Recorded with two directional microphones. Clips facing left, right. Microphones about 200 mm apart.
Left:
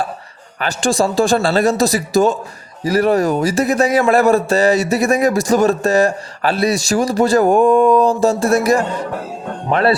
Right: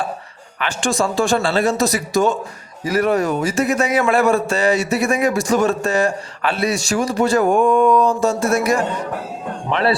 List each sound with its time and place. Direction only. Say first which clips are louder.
0.6 s a man's voice: left 3 dB; 35° left (ahead or behind)